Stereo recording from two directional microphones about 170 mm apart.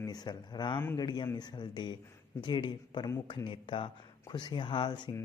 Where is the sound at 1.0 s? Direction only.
25° left (ahead or behind).